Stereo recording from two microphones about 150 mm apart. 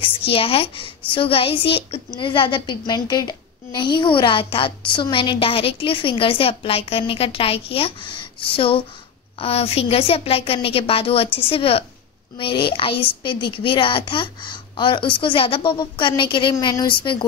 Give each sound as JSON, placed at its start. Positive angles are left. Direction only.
{"t": 0.0, "sound": "speech", "side_deg": 40}